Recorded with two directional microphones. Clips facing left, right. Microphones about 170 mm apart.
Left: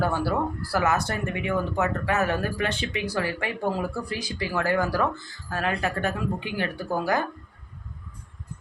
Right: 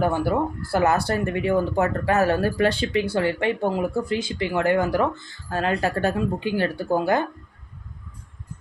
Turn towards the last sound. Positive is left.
turn(degrees=-25)  # may be behind; listen again after turning